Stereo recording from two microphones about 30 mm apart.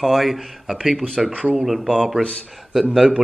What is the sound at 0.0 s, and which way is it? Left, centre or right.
Speech, centre.